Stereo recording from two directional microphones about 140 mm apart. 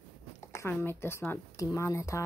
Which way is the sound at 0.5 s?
20° left (ahead or behind).